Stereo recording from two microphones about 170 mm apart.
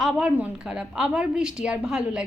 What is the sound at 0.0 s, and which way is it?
A woman's voice, 5° right (ahead or behind).